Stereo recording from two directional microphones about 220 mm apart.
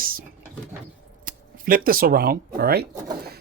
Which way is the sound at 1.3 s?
40° right (ahead or behind).